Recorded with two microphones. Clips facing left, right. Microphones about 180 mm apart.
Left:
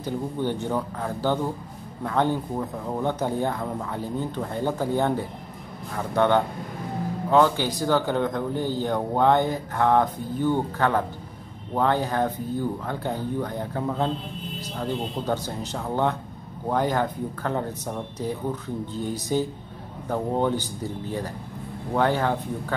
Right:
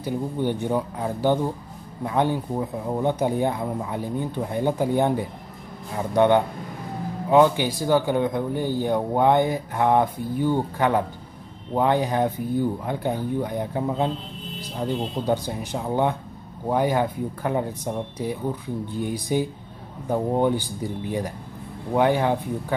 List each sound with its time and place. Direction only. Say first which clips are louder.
0.0 s speech: right 2 dB; 15° right (ahead or behind)